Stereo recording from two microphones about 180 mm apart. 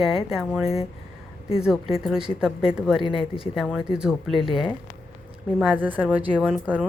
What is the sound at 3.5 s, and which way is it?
Speech, centre (ahead or behind).